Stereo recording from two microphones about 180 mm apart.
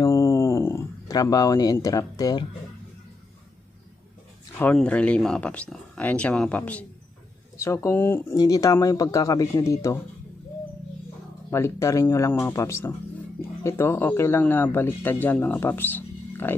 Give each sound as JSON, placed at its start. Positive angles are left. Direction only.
{"t": 0.0, "sound": "a sound", "side_deg": 15}
{"t": 4.6, "sound": "speech", "side_deg": 10}
{"t": 11.5, "sound": "speech", "side_deg": 15}